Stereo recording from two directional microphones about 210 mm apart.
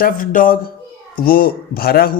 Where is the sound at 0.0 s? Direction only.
40° left (ahead or behind).